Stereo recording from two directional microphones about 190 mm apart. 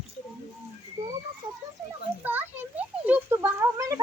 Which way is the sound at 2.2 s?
10° right (ahead or behind).